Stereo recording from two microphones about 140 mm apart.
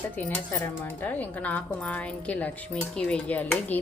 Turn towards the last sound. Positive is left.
turn(degrees=10)  # may be behind; listen again after turning